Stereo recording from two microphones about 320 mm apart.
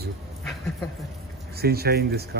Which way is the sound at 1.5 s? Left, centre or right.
Right.